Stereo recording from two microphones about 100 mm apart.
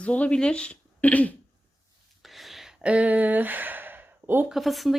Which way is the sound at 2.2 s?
Centre (ahead or behind).